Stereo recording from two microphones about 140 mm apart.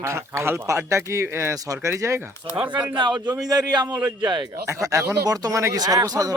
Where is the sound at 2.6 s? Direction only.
10° right (ahead or behind).